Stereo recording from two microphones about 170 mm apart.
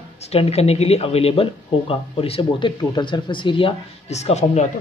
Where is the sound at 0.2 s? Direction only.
35° left (ahead or behind).